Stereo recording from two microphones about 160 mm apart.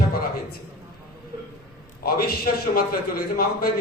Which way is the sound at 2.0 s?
70° left (ahead or behind).